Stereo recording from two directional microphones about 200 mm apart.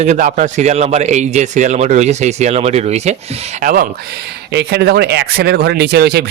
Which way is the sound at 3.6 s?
45° right (ahead or behind).